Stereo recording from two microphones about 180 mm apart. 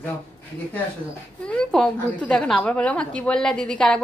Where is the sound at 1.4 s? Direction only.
5° left (ahead or behind).